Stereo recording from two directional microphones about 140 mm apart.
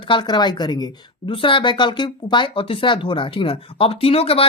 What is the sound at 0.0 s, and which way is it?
A woman's voice, 35° left (ahead or behind).